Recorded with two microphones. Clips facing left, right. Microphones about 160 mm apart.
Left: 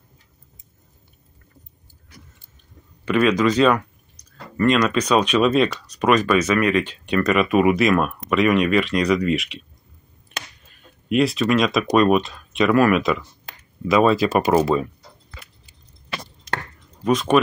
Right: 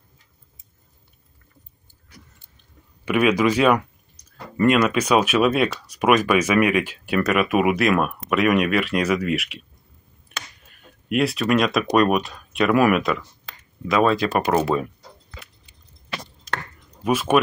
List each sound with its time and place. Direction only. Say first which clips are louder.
3.1 s speech: left 1 dB; 10° right (ahead or behind)
11.1 s speech: left 2 dB; centre (ahead or behind)
17.0 s speech: left 1 dB; 5° right (ahead or behind)